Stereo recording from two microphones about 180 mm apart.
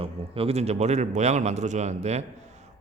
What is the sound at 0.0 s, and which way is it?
Speech, 35° right (ahead or behind).